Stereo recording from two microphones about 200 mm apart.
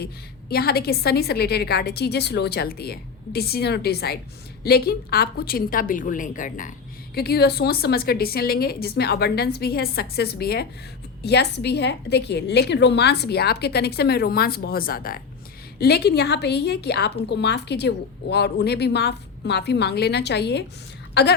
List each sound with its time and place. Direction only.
0.5 s a woman's voice: 50° left (ahead or behind)
7.2 s a woman's voice: 50° left (ahead or behind)